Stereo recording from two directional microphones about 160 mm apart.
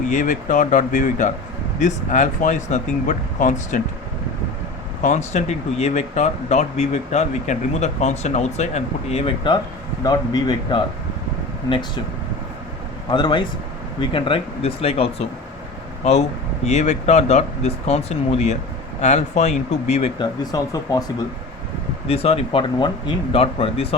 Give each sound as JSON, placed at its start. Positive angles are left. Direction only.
{"t": 0.0, "sound": "speech", "side_deg": 50}
{"t": 5.0, "sound": "speech", "side_deg": 45}
{"t": 13.1, "sound": "speech", "side_deg": 30}
{"t": 20.1, "sound": "speech", "side_deg": 25}
{"t": 22.0, "sound": "speech", "side_deg": 40}